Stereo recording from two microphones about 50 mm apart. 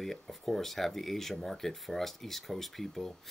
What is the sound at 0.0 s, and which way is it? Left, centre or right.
Speech, centre.